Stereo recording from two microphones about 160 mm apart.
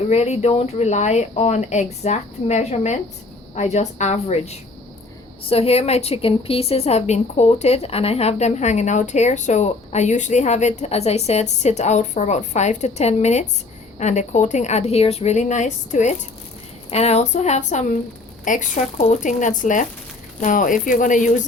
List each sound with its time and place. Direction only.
0.1 s a woman's voice: 45° left (ahead or behind)